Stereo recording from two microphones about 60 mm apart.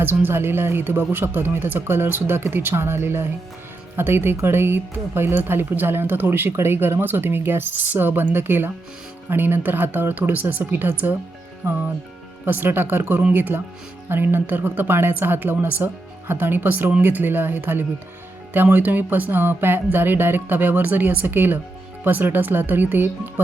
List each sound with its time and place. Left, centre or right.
0.0 s speech: right
12.5 s speech: right